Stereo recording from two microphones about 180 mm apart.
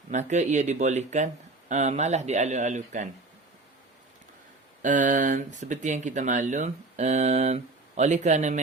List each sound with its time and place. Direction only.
0.1 s speech: 40° right (ahead or behind)
4.8 s speech: 45° right (ahead or behind)